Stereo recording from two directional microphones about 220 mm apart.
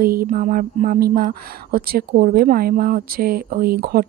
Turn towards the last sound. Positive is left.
turn(degrees=-45)  # may be behind; listen again after turning